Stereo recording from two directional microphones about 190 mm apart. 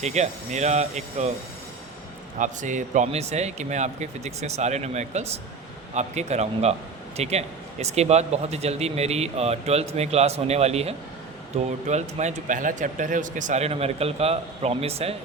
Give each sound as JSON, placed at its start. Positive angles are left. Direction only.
{"t": 0.0, "sound": "speech", "side_deg": -35}
{"t": 2.4, "sound": "speech", "side_deg": -40}